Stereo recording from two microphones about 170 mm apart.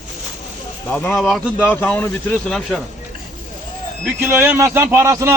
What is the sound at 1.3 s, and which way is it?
Speech, 5° right (ahead or behind).